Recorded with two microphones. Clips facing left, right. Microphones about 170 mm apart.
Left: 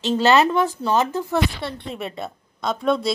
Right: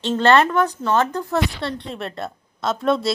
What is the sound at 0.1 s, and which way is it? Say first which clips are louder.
A woman's voice: right 1 dB; 5° left (ahead or behind).